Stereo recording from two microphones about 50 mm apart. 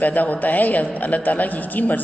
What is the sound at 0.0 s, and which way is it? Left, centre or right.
A woman's voice, left.